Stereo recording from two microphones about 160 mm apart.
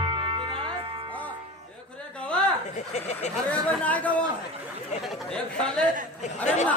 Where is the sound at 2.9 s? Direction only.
45° left (ahead or behind).